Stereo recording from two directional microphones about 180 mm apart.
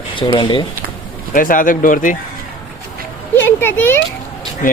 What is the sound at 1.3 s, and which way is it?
Speech, 50° left (ahead or behind).